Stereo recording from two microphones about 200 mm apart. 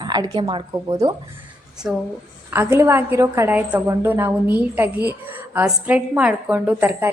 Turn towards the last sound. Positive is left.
turn(degrees=-10)  # may be behind; listen again after turning